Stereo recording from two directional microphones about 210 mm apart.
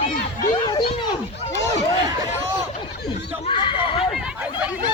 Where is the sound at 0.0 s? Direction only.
40° left (ahead or behind).